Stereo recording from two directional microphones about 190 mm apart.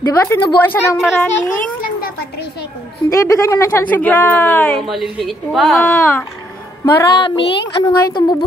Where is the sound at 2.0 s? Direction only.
55° left (ahead or behind).